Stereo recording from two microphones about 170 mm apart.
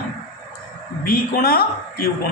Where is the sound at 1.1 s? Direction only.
60° left (ahead or behind).